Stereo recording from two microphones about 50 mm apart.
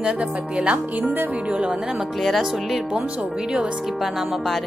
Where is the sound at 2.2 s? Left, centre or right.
Centre.